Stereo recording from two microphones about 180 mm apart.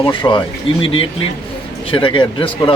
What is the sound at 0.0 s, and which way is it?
Speech, 25° left (ahead or behind).